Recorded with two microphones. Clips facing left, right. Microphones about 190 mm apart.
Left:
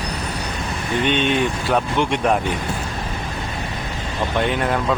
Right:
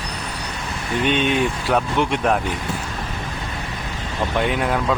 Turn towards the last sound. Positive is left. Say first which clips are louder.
# even
turn(degrees=-5)  # may be behind; listen again after turning